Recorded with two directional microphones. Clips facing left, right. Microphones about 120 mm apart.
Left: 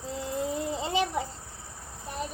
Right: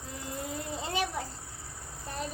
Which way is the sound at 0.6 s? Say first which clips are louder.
Left 2 dB; 20° left (ahead or behind).